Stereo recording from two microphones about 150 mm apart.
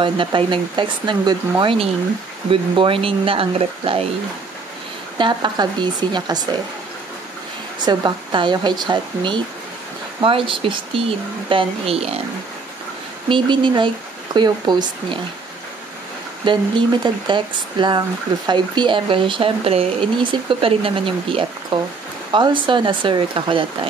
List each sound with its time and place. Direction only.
0.0 s speech: 35° right (ahead or behind)
5.1 s speech: 30° right (ahead or behind)
7.8 s speech: 30° right (ahead or behind)
13.3 s speech: 30° right (ahead or behind)
16.4 s speech: 35° right (ahead or behind)